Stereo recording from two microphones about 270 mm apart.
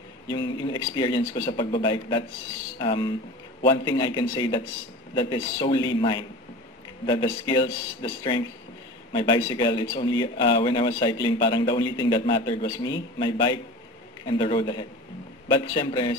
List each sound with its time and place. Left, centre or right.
0.3 s a man's voice: centre